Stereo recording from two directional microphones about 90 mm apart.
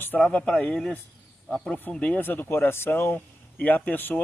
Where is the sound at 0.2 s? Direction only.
10° left (ahead or behind).